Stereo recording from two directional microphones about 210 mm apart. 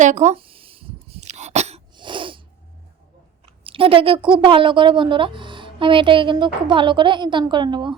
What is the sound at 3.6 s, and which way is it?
A woman's voice, 25° right (ahead or behind).